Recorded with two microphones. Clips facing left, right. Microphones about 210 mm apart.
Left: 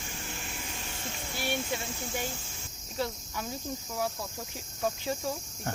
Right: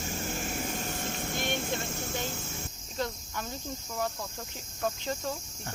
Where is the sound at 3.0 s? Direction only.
5° left (ahead or behind).